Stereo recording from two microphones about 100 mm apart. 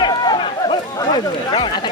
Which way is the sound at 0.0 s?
45° left (ahead or behind).